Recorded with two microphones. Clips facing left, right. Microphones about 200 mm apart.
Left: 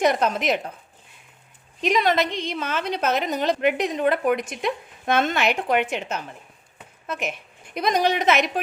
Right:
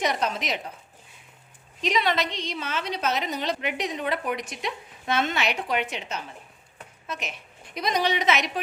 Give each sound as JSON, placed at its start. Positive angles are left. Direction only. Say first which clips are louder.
{"t": 0.0, "sound": "a woman's voice", "louder": "left 6 dB", "side_deg": 55}
{"t": 1.8, "sound": "a woman's voice", "louder": "left 4 dB", "side_deg": 50}